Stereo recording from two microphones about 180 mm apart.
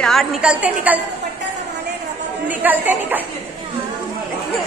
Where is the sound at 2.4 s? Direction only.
10° right (ahead or behind).